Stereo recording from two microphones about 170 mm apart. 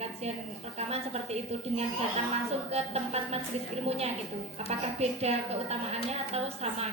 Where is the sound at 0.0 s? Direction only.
40° right (ahead or behind).